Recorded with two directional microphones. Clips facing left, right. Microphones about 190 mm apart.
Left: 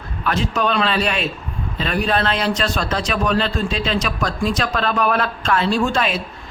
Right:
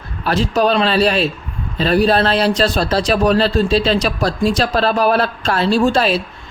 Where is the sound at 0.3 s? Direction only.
35° right (ahead or behind).